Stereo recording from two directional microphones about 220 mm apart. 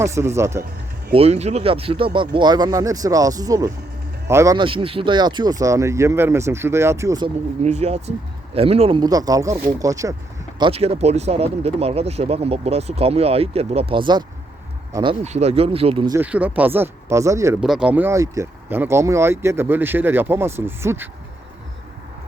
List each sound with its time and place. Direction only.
0.0 s speech: 15° right (ahead or behind)
1.1 s speech: 30° right (ahead or behind)
7.6 s speech: 30° right (ahead or behind); by 10.2 s 15° right (ahead or behind)
10.6 s speech: 25° right (ahead or behind)
16.1 s speech: 5° right (ahead or behind)
17.6 s speech: 5° right (ahead or behind)